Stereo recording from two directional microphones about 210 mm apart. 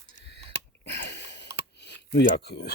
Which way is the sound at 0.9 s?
55° left (ahead or behind).